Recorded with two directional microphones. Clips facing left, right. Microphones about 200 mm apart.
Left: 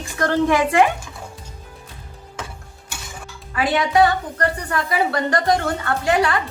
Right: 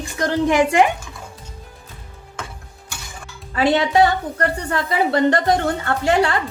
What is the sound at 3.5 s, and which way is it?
A woman's voice, 25° right (ahead or behind).